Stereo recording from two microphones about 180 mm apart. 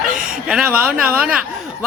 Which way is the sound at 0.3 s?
5° right (ahead or behind).